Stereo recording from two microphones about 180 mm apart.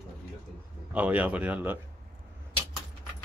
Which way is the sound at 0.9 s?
10° right (ahead or behind).